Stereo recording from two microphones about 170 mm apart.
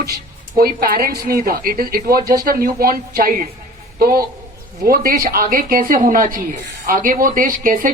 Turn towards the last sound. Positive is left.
turn(degrees=-55)  # may be behind; listen again after turning